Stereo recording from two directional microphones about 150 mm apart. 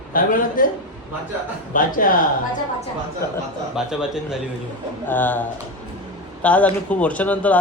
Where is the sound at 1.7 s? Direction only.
65° left (ahead or behind).